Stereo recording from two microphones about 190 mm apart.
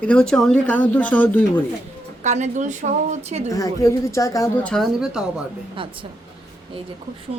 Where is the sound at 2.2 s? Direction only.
40° right (ahead or behind).